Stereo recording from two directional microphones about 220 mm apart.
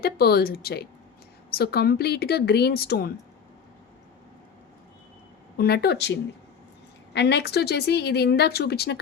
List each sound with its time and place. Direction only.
0.0 s speech: 45° left (ahead or behind)
5.5 s speech: 45° left (ahead or behind)